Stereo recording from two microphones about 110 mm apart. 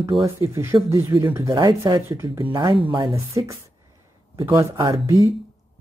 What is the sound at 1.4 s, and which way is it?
Speech, 35° right (ahead or behind).